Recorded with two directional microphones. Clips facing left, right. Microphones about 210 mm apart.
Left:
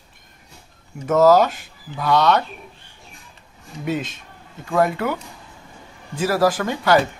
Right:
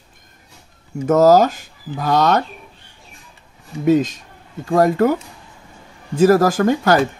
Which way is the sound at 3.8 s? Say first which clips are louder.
Right 10 dB; 40° right (ahead or behind).